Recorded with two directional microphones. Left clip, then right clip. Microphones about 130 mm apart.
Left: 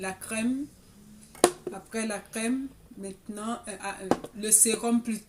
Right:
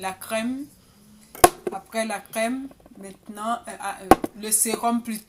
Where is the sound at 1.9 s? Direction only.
20° left (ahead or behind).